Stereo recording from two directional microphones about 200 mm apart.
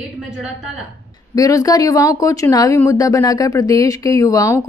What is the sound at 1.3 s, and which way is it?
Speech, 15° left (ahead or behind).